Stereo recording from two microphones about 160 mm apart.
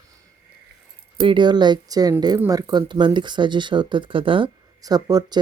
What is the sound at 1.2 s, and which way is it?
Speech, 30° right (ahead or behind).